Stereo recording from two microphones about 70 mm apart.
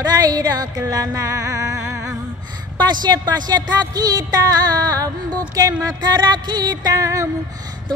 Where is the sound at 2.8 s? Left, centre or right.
Right.